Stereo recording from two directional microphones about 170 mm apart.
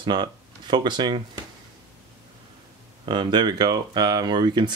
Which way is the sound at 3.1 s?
25° right (ahead or behind).